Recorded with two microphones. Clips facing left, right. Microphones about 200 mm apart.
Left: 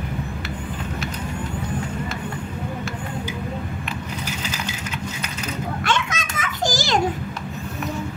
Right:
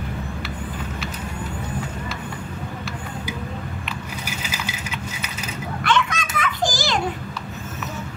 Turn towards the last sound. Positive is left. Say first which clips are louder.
# left 1 dB
turn(degrees=45)  # may be behind; listen again after turning